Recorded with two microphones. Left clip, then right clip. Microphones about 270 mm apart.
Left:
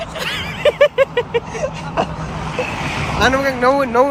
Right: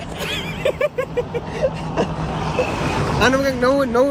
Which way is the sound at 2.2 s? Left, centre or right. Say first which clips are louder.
Right 1 dB; centre.